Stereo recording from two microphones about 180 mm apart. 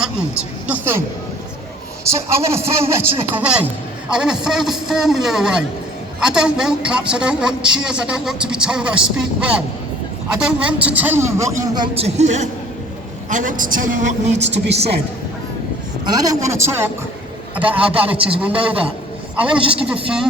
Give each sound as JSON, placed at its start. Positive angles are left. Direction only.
{"t": 0.7, "sound": "a woman's voice", "side_deg": -15}
{"t": 2.0, "sound": "a woman's voice", "side_deg": -15}
{"t": 16.0, "sound": "a woman's voice", "side_deg": -20}